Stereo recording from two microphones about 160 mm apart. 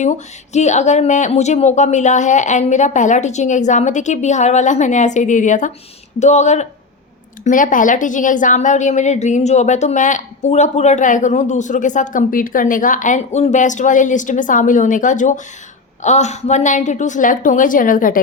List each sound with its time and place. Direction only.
0.5 s a woman's voice: 45° left (ahead or behind)